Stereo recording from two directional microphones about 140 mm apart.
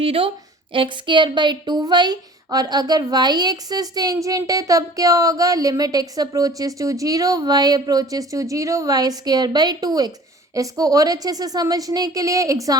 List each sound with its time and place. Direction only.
0.0 s a woman's voice: 40° right (ahead or behind); by 12.7 s 25° right (ahead or behind)